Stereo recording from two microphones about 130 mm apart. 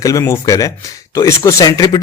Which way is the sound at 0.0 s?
25° left (ahead or behind).